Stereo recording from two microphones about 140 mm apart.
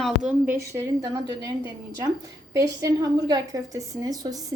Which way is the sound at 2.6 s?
25° right (ahead or behind).